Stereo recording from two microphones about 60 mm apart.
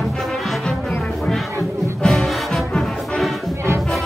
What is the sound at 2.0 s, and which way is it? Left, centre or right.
Music, centre.